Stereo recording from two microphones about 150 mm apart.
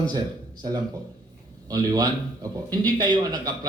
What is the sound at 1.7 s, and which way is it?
A man's voice, 25° right (ahead or behind).